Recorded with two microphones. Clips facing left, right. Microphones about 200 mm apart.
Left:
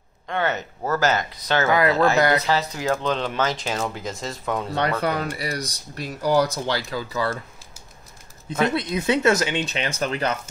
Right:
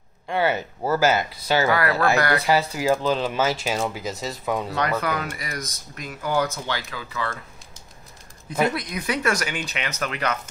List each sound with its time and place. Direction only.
0.3 s speech: 10° right (ahead or behind)
1.7 s speech: 20° left (ahead or behind)
2.4 s speech: 10° right (ahead or behind)
5.0 s speech: 35° left (ahead or behind)
8.7 s speech: 25° left (ahead or behind)